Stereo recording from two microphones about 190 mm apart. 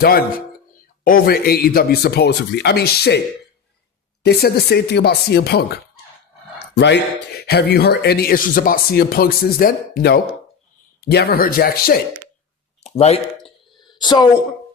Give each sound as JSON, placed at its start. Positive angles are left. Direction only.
{"t": 1.0, "sound": "speech", "side_deg": 50}
{"t": 4.2, "sound": "speech", "side_deg": 60}
{"t": 12.8, "sound": "a sound", "side_deg": 35}
{"t": 14.0, "sound": "a woman's voice", "side_deg": 20}